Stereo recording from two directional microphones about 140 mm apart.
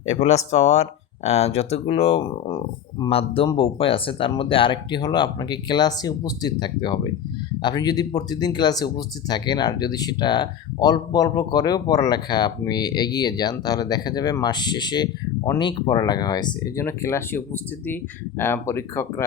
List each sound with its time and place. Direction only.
0.0 s speech: 50° left (ahead or behind); by 16.7 s 30° left (ahead or behind)
16.7 s speech: 20° left (ahead or behind)